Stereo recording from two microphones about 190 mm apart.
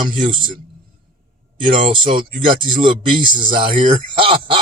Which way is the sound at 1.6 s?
25° right (ahead or behind).